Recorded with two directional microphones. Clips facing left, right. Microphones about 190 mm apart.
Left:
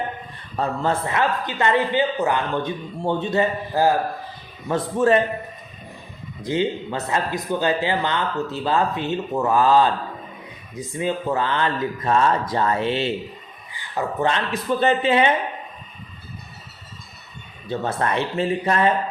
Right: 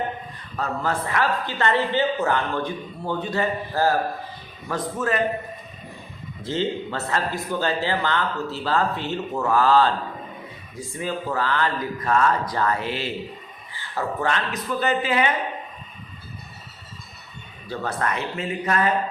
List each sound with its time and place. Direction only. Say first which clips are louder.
0.5 s speech: left 3 dB; 25° left (ahead or behind)
4.7 s speech: left 7 dB; 30° left (ahead or behind)
6.4 s speech: left 3 dB; 15° left (ahead or behind)
17.7 s speech: left 3 dB; 25° left (ahead or behind)